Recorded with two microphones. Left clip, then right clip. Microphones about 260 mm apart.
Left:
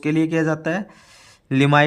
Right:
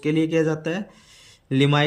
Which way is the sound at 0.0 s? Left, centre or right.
Centre.